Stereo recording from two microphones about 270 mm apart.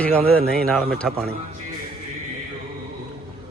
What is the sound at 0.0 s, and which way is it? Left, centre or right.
Speech, centre.